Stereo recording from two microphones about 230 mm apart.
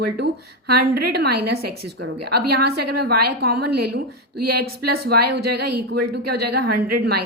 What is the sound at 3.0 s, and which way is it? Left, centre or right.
Speech, right.